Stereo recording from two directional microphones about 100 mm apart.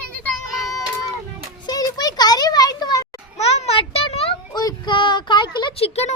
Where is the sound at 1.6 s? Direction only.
40° left (ahead or behind).